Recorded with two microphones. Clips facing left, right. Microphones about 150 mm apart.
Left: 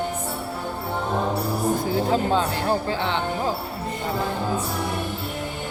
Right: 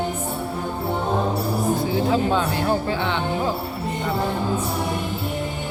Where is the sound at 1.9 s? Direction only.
35° left (ahead or behind).